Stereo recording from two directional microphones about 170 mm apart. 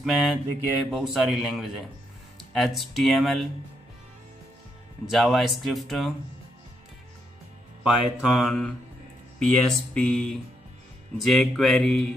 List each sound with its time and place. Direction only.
0.0 s speech: centre (ahead or behind)
5.1 s speech: centre (ahead or behind)
7.8 s speech: centre (ahead or behind)